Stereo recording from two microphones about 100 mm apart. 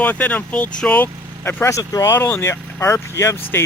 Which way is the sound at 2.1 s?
25° left (ahead or behind).